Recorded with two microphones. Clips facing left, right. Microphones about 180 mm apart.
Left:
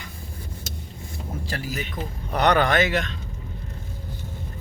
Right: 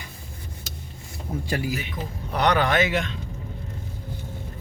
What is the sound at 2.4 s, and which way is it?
Speech, 50° left (ahead or behind).